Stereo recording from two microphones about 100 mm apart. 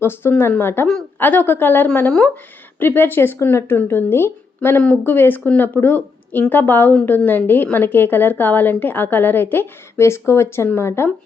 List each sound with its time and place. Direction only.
0.0 s a woman's voice: 20° left (ahead or behind)